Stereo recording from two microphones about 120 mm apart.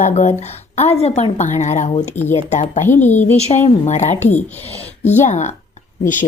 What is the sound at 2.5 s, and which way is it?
Speech, 90° left.